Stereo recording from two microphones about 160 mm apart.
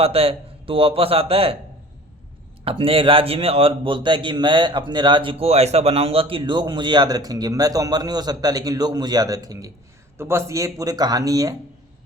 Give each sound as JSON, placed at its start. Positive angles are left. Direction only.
{"t": 0.0, "sound": "a man's voice", "side_deg": -35}
{"t": 2.6, "sound": "a man's voice", "side_deg": -35}